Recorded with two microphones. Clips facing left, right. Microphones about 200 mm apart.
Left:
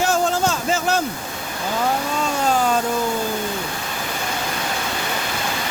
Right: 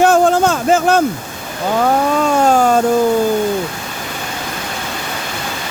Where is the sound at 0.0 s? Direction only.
55° right (ahead or behind).